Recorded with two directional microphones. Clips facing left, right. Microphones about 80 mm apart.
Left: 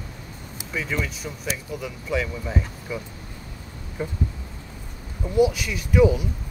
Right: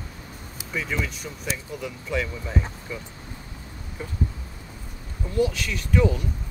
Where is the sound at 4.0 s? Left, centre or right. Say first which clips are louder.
Left 6 dB; left.